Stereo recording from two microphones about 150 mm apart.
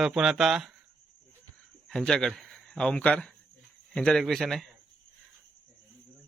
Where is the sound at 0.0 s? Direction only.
5° right (ahead or behind).